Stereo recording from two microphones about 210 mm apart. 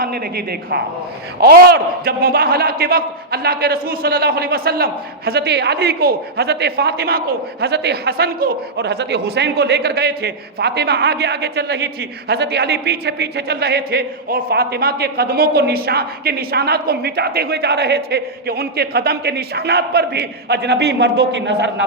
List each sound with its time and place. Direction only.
0.0 s a man's voice: 50° right (ahead or behind)